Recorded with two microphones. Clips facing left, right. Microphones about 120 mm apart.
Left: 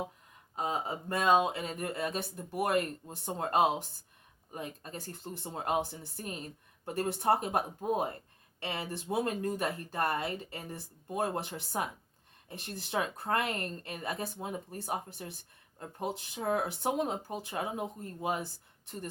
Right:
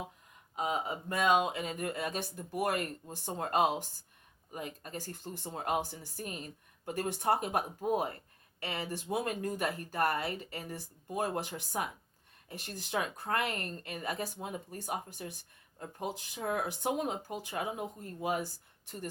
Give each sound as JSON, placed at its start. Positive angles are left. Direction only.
{"t": 0.5, "sound": "speech", "side_deg": 35}
{"t": 6.8, "sound": "speech", "side_deg": 30}